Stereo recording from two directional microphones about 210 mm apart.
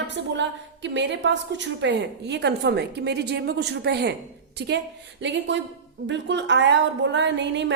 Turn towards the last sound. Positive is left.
turn(degrees=-55)  # may be behind; listen again after turning